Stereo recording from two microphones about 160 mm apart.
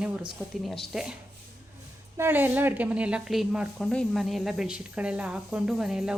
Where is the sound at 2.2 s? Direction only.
10° right (ahead or behind).